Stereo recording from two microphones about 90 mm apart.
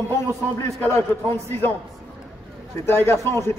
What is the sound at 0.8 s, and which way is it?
Speech, 30° left (ahead or behind).